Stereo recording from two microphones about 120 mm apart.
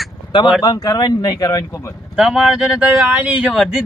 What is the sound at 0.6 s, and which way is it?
Speech, 30° left (ahead or behind).